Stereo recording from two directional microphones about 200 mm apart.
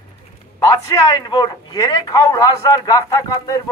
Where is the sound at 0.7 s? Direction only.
20° left (ahead or behind).